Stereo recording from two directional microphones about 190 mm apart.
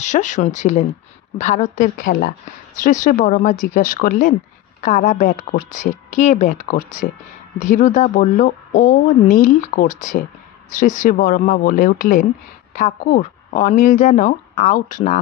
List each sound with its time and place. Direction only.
0.0 s a woman's voice: 40° left (ahead or behind)